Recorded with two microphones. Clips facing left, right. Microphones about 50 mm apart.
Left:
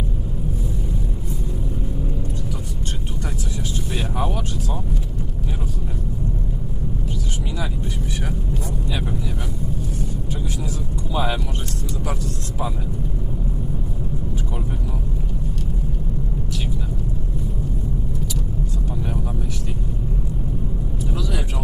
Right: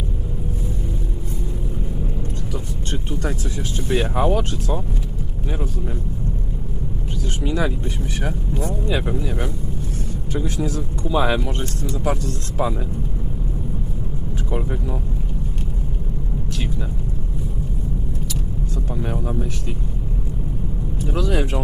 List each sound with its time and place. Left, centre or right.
3.8 s speech: right
7.4 s speech: right
8.9 s speech: right
10.7 s speech: right
21.0 s vehicle: right